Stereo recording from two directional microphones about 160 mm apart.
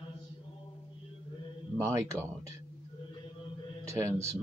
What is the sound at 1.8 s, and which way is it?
Speech, 15° right (ahead or behind).